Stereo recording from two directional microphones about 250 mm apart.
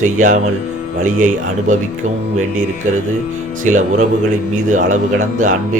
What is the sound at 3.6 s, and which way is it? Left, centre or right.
A man's voice, right.